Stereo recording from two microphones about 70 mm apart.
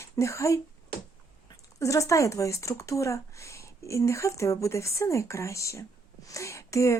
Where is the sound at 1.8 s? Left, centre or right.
Left.